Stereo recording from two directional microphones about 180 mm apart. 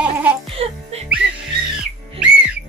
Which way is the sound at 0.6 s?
35° right (ahead or behind).